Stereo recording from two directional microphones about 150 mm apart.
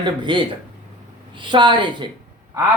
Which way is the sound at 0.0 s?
30° right (ahead or behind).